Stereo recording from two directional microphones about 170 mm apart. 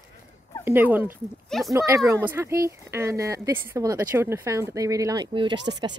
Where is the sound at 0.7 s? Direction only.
10° right (ahead or behind).